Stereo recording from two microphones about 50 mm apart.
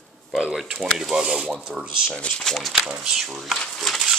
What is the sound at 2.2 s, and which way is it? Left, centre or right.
Speech, left.